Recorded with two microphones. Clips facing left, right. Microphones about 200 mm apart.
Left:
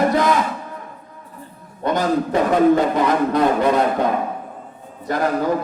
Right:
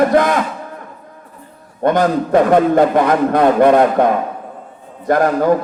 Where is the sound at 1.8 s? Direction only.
55° right (ahead or behind).